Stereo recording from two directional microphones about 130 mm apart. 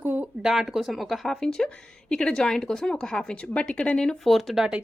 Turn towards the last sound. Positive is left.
turn(degrees=-5)  # may be behind; listen again after turning